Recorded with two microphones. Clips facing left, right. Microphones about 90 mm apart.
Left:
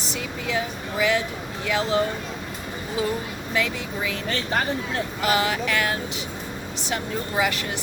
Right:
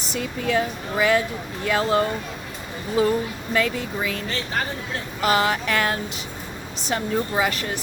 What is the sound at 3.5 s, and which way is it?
Speech, 40° right (ahead or behind).